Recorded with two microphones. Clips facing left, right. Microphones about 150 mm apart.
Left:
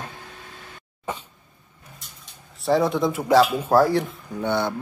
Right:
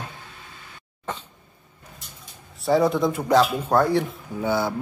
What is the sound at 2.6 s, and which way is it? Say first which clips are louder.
Speech: right 1 dB; centre (ahead or behind).